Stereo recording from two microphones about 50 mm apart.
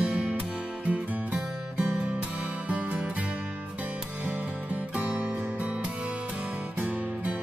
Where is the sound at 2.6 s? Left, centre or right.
Right.